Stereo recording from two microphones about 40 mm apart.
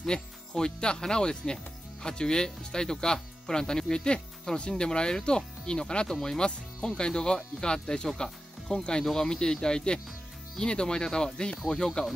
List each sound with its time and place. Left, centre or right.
0.0 s speech: centre